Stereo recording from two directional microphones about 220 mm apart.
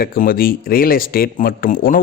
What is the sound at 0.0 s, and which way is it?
Speech, 40° left (ahead or behind).